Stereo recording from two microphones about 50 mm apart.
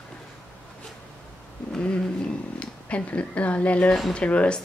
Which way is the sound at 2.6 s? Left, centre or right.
Left.